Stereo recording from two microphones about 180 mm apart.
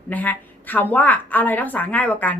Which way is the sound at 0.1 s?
10° left (ahead or behind).